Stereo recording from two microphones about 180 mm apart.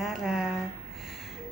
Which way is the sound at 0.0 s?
5° right (ahead or behind).